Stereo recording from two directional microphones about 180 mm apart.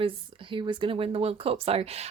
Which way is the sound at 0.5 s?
25° right (ahead or behind).